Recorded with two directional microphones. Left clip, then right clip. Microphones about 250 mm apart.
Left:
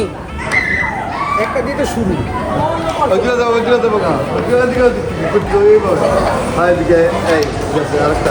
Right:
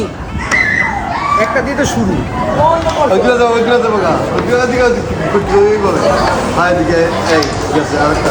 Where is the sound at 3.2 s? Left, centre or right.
Right.